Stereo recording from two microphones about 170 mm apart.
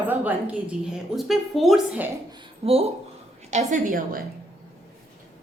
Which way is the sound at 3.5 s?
50° right (ahead or behind).